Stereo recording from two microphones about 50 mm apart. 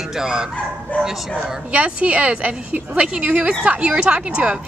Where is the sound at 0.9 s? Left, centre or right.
Left.